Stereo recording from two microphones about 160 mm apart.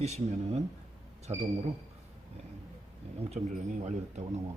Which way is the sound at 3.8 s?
45° right (ahead or behind).